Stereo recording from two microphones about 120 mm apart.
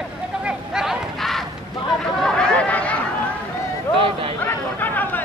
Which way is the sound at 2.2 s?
10° left (ahead or behind).